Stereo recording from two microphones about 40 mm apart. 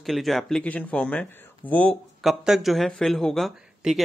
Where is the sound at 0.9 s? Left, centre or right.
Left.